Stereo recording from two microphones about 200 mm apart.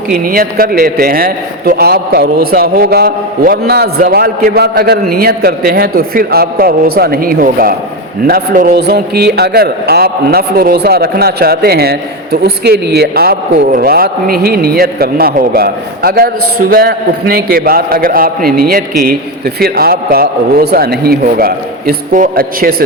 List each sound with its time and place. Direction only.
0.1 s a man's voice: 45° right (ahead or behind)